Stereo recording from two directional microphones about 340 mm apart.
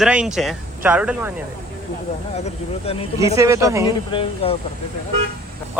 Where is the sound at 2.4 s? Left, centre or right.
Centre.